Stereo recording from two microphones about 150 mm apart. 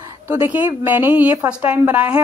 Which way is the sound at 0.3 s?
15° right (ahead or behind).